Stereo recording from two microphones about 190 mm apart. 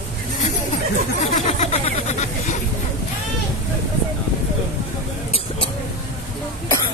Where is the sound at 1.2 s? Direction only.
35° left (ahead or behind).